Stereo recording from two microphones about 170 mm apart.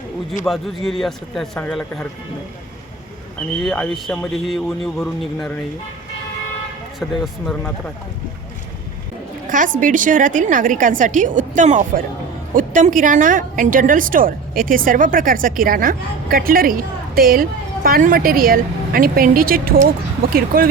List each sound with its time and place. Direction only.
0.4 s a man's voice: centre (ahead or behind)
3.6 s a man's voice: centre (ahead or behind)
7.0 s a man's voice: centre (ahead or behind)
9.7 s a woman's voice: 50° right (ahead or behind)